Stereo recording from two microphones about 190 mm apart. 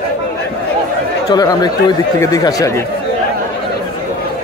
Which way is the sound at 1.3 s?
20° left (ahead or behind).